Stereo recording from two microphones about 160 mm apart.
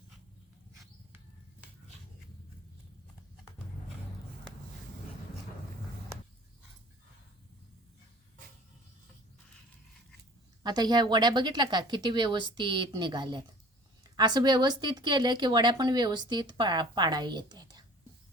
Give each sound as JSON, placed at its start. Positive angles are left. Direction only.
{"t": 10.6, "sound": "a woman's voice", "side_deg": -25}